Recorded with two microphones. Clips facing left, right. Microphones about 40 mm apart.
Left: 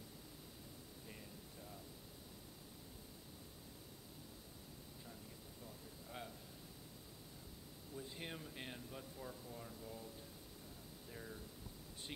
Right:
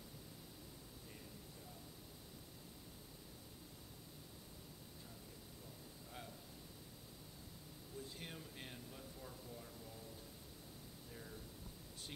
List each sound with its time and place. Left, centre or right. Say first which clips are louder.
7.9 s speech: left 2 dB; centre
11.1 s speech: left 4 dB; centre